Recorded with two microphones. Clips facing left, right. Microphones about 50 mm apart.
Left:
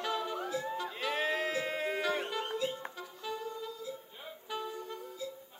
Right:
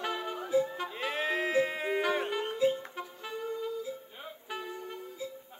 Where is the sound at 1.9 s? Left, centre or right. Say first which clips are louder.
Right 3 dB; right.